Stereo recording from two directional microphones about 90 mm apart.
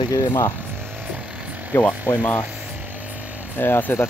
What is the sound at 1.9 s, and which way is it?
Speech, 15° left (ahead or behind).